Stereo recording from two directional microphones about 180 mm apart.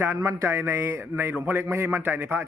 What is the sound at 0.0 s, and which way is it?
A man's voice, 15° right (ahead or behind).